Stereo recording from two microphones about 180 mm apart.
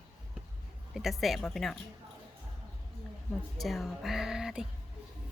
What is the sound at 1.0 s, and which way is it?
Speech, centre (ahead or behind).